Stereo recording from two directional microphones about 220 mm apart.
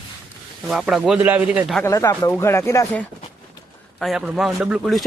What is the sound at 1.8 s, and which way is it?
Speech, 15° left (ahead or behind).